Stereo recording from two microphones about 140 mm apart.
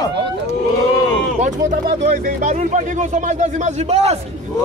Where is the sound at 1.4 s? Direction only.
60° right (ahead or behind).